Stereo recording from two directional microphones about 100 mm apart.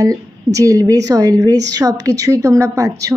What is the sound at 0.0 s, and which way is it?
A woman's voice, 35° right (ahead or behind).